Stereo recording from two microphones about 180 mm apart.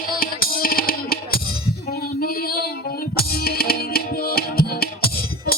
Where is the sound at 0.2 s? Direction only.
55° left (ahead or behind).